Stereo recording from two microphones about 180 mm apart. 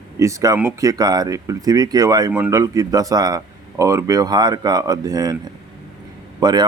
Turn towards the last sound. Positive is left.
turn(degrees=-25)  # may be behind; listen again after turning